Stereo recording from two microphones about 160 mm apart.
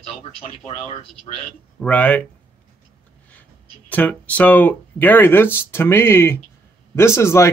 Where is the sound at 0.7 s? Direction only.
45° left (ahead or behind).